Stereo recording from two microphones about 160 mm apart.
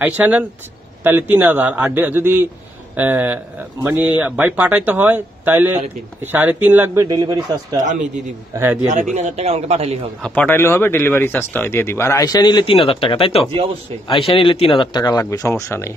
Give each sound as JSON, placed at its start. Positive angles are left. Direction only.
{"t": 0.0, "sound": "speech", "side_deg": -10}
{"t": 7.1, "sound": "speech", "side_deg": -25}
{"t": 9.1, "sound": "speech", "side_deg": -45}
{"t": 10.2, "sound": "speech", "side_deg": 10}